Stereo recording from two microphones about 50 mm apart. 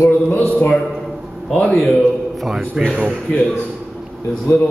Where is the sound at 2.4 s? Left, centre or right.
Centre.